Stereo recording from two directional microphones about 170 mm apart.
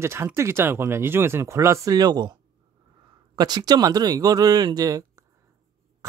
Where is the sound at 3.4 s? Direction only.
25° right (ahead or behind).